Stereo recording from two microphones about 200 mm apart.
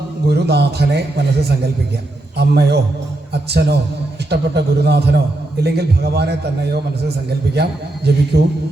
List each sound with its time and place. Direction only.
0.3 s a man's voice: 55° right (ahead or behind)
2.4 s a man's voice: 55° right (ahead or behind)